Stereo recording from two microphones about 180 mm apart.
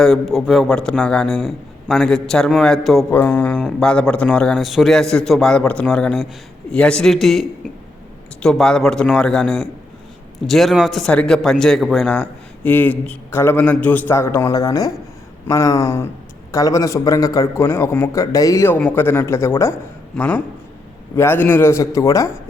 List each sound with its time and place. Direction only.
0.0 s a man's voice: centre (ahead or behind); by 22.3 s 20° left (ahead or behind)